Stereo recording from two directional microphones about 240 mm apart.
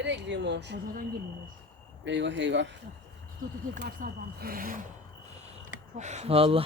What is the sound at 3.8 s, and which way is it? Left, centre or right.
Speech, right.